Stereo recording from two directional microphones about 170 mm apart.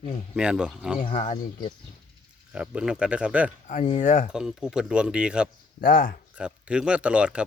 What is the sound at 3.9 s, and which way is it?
Speech, 50° left (ahead or behind).